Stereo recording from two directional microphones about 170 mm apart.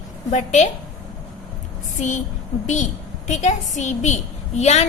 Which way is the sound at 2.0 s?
45° left (ahead or behind).